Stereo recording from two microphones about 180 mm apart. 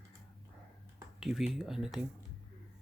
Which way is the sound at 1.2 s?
5° right (ahead or behind).